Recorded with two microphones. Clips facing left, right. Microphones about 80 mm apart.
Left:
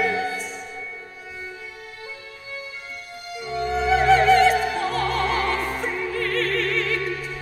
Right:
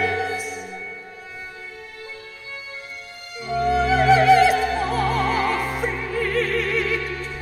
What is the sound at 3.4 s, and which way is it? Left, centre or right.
Opera, centre.